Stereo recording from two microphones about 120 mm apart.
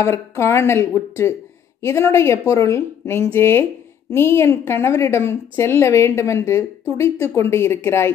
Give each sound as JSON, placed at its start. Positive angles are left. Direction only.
{"t": 0.0, "sound": "a woman's voice", "side_deg": 25}